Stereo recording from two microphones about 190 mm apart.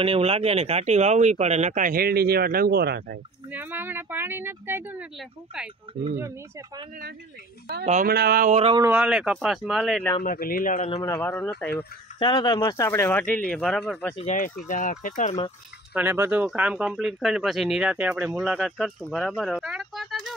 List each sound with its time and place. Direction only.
0.0 s speech: 30° right (ahead or behind); by 3.2 s 55° right (ahead or behind)
3.5 s speech: 10° right (ahead or behind)
5.9 s speech: 25° right (ahead or behind)
7.8 s speech: 35° right (ahead or behind)
8.1 s speech: 55° right (ahead or behind)
8.5 s speech: 30° right (ahead or behind)
8.8 s speech: 5° right (ahead or behind)
10.2 s speech: 50° left (ahead or behind)
11.1 s speech: 10° left (ahead or behind)
12.2 s speech: 25° left (ahead or behind); by 14.1 s centre (ahead or behind)
14.7 s speech: 45° left (ahead or behind)
15.9 s speech: 10° right (ahead or behind)